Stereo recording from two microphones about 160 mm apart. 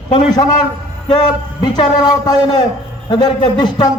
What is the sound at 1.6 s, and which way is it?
A man's voice, 25° left (ahead or behind).